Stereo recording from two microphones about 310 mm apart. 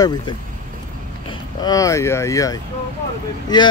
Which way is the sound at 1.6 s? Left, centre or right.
Centre.